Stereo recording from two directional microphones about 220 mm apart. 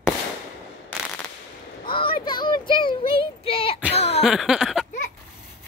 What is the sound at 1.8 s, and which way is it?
Child singing, 25° left (ahead or behind).